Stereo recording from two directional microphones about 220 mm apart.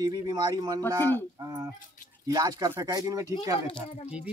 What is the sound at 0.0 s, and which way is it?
Speech, 15° right (ahead or behind).